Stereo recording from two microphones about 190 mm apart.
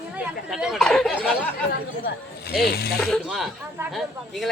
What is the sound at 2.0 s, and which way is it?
Speech, 55° left (ahead or behind).